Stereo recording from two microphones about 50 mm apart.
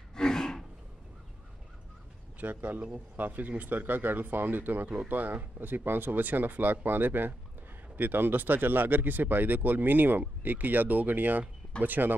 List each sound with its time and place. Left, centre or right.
0.1 s rub: centre
2.4 s speech: right